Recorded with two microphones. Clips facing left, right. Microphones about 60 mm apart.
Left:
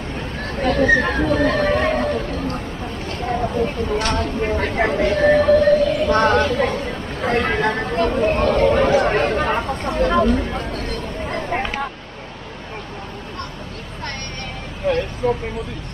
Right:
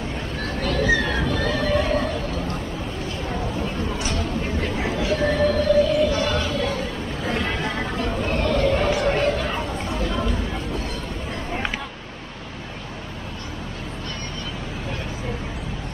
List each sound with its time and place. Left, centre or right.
0.4 s neigh: left
1.9 s chatter: left
3.5 s speech: left
5.6 s a sound: left
7.8 s speech: left
8.3 s a sound: left